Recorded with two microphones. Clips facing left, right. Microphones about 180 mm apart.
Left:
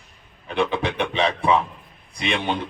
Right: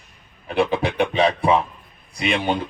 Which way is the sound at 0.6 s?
35° right (ahead or behind).